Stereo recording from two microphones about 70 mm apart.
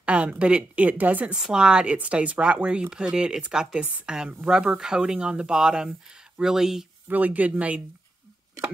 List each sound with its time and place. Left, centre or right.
0.0 s speech: centre
3.8 s speech: right
7.1 s speech: right